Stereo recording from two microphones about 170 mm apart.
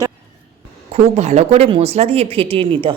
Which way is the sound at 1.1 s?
40° right (ahead or behind).